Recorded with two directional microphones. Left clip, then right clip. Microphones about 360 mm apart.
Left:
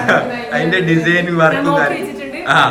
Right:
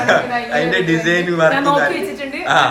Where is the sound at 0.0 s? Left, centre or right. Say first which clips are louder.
Even; centre.